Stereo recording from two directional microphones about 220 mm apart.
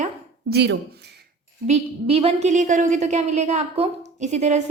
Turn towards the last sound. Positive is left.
turn(degrees=-30)  # may be behind; listen again after turning